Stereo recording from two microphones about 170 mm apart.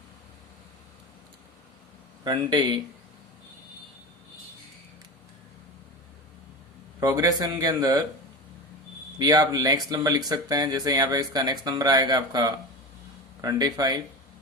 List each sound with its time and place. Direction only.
2.2 s speech: 30° right (ahead or behind)
7.0 s speech: 20° right (ahead or behind)
9.1 s speech: 25° right (ahead or behind)